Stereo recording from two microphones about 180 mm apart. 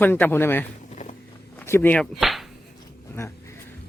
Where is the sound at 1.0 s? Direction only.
45° left (ahead or behind).